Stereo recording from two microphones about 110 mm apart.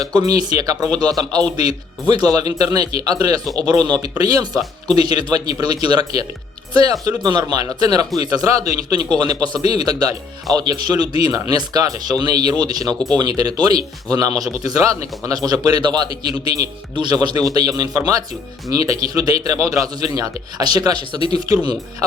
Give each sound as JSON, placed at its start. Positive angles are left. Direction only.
{"t": 0.1, "sound": "speech", "side_deg": -35}